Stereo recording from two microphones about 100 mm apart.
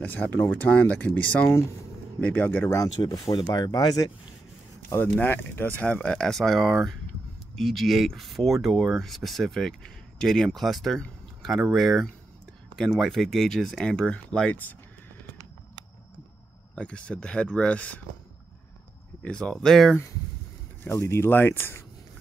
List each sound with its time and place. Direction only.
0.0 s speech: 15° left (ahead or behind)
2.7 s speech: 35° left (ahead or behind)
4.8 s speech: 20° left (ahead or behind)
16.7 s speech: 10° left (ahead or behind)
19.2 s speech: 10° left (ahead or behind)
20.8 s speech: 25° left (ahead or behind)